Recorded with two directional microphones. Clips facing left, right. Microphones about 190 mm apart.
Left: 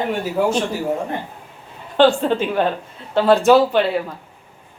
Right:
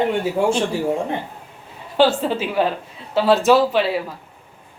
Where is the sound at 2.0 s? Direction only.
5° right (ahead or behind).